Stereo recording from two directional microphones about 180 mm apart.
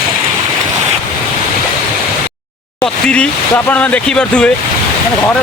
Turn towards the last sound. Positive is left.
turn(degrees=5)  # may be behind; listen again after turning